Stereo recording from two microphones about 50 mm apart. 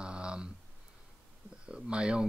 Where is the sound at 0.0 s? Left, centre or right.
Centre.